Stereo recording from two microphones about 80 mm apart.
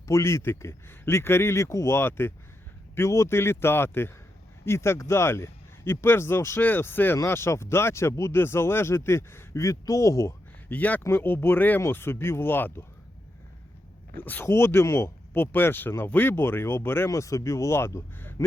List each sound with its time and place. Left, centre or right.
0.1 s speech: left
10.7 s speech: left
14.2 s speech: left
14.4 s speech: left
17.1 s speech: left